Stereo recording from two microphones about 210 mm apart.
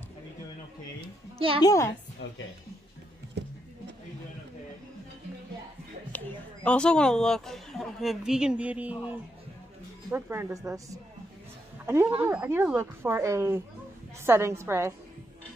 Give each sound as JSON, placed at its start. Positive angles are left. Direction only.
{"t": 1.6, "sound": "a woman's voice", "side_deg": 15}
{"t": 6.1, "sound": "a woman's voice", "side_deg": 5}
{"t": 10.1, "sound": "speech", "side_deg": -10}